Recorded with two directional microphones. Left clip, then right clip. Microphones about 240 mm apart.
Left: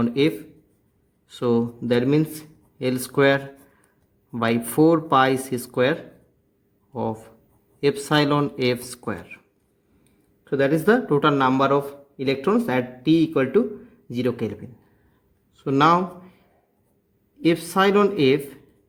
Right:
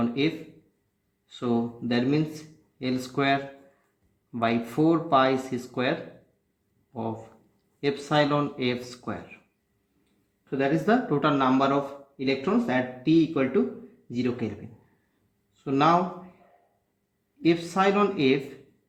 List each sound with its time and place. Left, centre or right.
0.0 s speech: left
1.3 s speech: left
7.8 s speech: left
10.6 s speech: left
15.6 s speech: left
17.4 s speech: left